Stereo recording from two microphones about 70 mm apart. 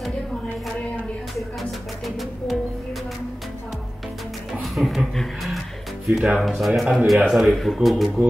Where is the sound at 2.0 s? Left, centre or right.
Centre.